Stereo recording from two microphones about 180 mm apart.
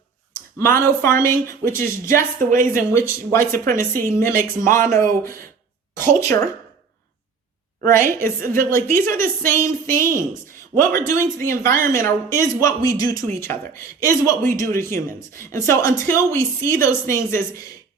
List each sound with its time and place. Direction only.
0.6 s speech: 15° left (ahead or behind)
2.5 s speech: 50° right (ahead or behind)
2.9 s speech: 15° left (ahead or behind)
7.8 s speech: 15° left (ahead or behind)